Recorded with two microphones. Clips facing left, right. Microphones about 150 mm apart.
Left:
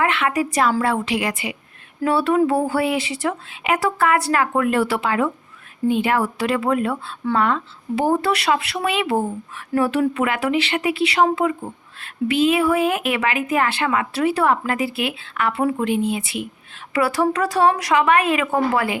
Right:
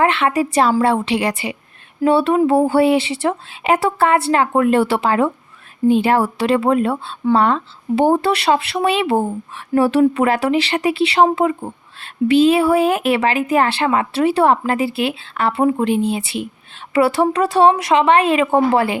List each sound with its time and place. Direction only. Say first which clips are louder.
0.0 s speech: right 4 dB; 30° right (ahead or behind)